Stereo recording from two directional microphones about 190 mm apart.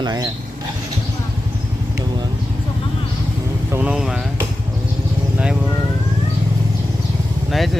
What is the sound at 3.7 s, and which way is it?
Speech, 5° right (ahead or behind).